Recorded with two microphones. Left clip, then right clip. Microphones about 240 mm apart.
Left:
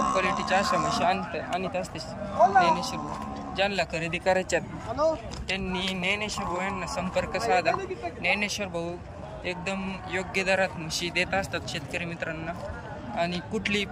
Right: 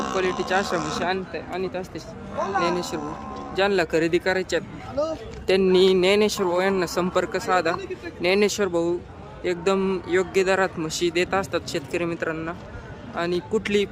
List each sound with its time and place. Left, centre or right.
0.0 s a man's voice: centre
5.5 s a man's voice: right